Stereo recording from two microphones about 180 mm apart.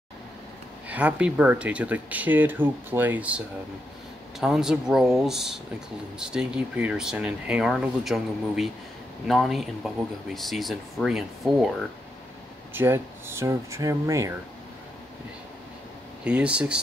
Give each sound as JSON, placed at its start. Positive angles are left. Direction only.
{"t": 0.8, "sound": "speech", "side_deg": -10}
{"t": 12.7, "sound": "speech", "side_deg": -15}
{"t": 16.3, "sound": "speech", "side_deg": -5}